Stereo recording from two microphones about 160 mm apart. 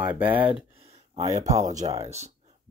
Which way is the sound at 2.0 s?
45° right (ahead or behind).